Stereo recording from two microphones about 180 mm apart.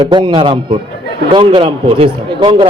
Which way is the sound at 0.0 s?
25° right (ahead or behind).